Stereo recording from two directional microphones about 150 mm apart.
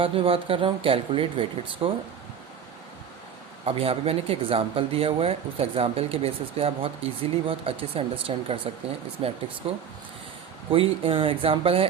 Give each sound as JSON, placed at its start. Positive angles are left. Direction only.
{"t": 0.0, "sound": "speech", "side_deg": -35}
{"t": 3.7, "sound": "speech", "side_deg": -40}